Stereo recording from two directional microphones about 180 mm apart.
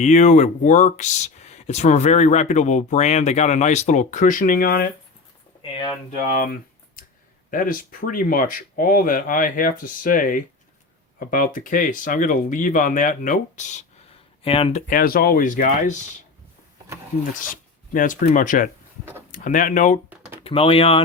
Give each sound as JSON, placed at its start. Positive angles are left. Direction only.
{"t": 0.0, "sound": "speech", "side_deg": 40}
{"t": 6.1, "sound": "speech", "side_deg": 50}
{"t": 14.4, "sound": "speech", "side_deg": 30}
{"t": 17.4, "sound": "speech", "side_deg": 50}
{"t": 20.1, "sound": "a sound", "side_deg": -10}
{"t": 20.4, "sound": "speech", "side_deg": 30}